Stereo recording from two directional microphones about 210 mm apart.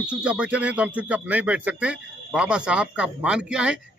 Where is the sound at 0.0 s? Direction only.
5° right (ahead or behind).